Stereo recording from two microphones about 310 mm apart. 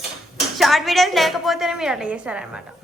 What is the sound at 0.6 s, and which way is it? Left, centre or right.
A woman's voice, centre.